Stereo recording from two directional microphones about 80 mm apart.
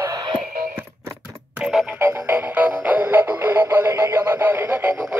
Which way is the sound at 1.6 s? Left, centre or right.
Centre.